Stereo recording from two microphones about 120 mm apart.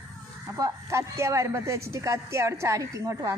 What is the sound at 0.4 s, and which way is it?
Speech, 25° right (ahead or behind).